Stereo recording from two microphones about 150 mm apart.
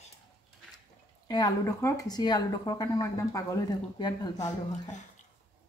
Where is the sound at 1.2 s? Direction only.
25° left (ahead or behind).